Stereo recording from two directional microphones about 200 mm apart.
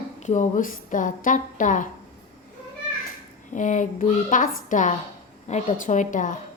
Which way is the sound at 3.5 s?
40° left (ahead or behind).